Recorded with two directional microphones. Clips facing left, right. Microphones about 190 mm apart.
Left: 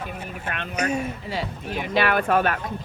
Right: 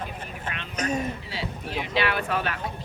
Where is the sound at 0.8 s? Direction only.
10° left (ahead or behind).